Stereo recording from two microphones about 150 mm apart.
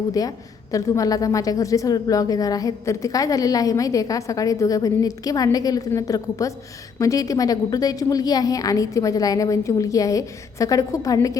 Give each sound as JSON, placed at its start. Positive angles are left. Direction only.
{"t": 0.1, "sound": "a woman's voice", "side_deg": 25}